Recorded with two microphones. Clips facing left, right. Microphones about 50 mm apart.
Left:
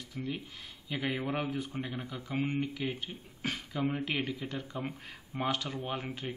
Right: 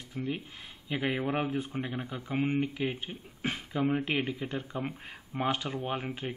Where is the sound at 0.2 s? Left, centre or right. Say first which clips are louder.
Right 3 dB; centre.